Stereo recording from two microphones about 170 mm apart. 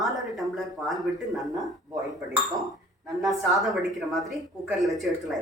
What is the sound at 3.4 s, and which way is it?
Speech, centre (ahead or behind).